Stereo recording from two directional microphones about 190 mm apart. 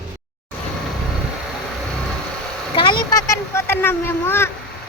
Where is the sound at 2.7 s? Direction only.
25° left (ahead or behind).